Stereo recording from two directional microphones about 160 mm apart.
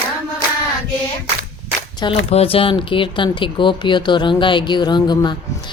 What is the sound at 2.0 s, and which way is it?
Speech, 35° left (ahead or behind).